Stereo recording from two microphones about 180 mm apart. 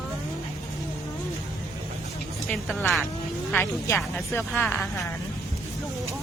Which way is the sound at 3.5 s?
15° left (ahead or behind).